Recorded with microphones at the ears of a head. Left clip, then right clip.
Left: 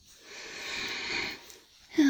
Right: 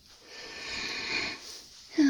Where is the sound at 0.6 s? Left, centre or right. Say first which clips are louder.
Even; centre.